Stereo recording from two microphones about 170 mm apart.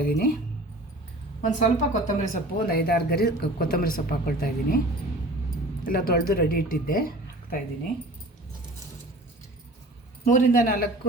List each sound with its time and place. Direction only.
0.0 s speech: 60° left (ahead or behind)
1.4 s speech: 45° left (ahead or behind)
5.8 s speech: 60° left (ahead or behind)
10.2 s speech: 50° left (ahead or behind)